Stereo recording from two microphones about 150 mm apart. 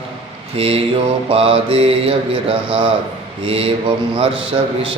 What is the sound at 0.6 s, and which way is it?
Mantra, 40° right (ahead or behind).